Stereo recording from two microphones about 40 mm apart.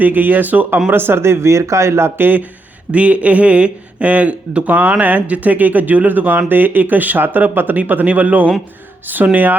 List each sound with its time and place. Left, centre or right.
0.0 s speech: right
0.9 s speech: right
2.9 s a man's voice: right
7.8 s speech: right